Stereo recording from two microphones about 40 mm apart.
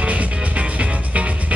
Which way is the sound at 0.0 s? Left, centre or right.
Right.